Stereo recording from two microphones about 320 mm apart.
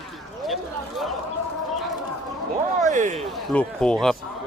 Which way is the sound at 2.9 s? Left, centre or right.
Right.